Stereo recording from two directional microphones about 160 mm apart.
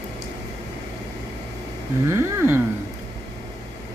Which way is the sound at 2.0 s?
15° right (ahead or behind).